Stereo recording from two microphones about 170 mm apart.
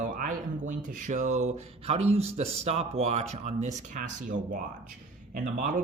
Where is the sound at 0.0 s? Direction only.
50° right (ahead or behind).